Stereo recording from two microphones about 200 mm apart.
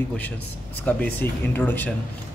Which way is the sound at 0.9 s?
5° left (ahead or behind).